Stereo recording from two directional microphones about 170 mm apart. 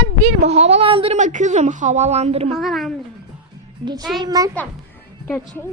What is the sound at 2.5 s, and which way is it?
Speech, centre (ahead or behind).